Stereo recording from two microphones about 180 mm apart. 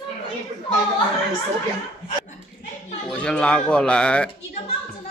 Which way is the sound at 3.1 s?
5° left (ahead or behind).